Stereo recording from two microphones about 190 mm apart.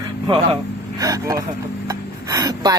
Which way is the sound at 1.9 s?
20° right (ahead or behind).